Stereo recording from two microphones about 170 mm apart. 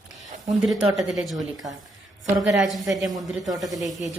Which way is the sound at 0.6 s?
5° right (ahead or behind).